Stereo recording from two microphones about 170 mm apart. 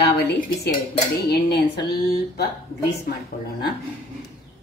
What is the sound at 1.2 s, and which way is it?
Cutlery, 70° left (ahead or behind).